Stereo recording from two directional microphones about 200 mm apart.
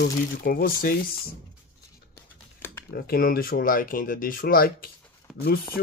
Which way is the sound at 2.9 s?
50° left (ahead or behind).